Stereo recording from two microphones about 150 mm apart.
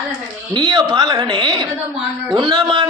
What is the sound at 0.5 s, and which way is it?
A man's voice, 30° right (ahead or behind).